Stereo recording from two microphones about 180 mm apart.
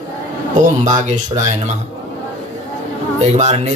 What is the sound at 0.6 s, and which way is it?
Speech, 45° right (ahead or behind).